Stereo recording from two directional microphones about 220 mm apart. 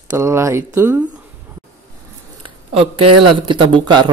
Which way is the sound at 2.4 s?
25° right (ahead or behind).